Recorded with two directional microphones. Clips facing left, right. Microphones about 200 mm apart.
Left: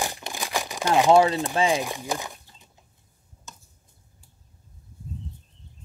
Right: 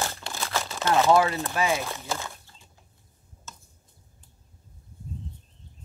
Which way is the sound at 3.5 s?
15° left (ahead or behind).